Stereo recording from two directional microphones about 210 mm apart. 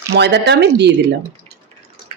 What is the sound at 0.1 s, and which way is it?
Speech, 50° right (ahead or behind).